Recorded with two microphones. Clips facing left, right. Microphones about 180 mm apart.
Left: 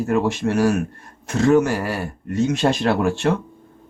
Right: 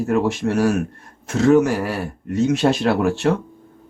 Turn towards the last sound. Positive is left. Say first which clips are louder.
# right 1 dB
turn(degrees=0)  # may be behind; listen again after turning